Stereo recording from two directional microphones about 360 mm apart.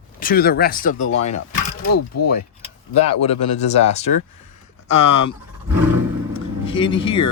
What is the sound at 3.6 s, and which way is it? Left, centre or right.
Speech, centre.